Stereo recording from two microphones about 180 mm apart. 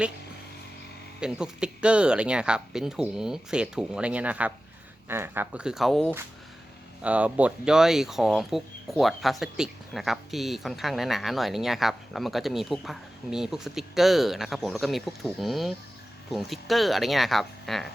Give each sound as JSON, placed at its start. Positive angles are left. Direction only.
{"t": 1.2, "sound": "speech", "side_deg": -5}
{"t": 7.0, "sound": "speech", "side_deg": -5}